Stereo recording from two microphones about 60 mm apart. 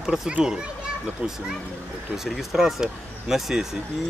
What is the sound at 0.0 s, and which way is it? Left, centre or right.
Speech, centre.